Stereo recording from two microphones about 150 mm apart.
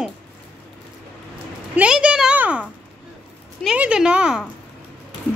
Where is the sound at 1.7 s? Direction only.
5° right (ahead or behind).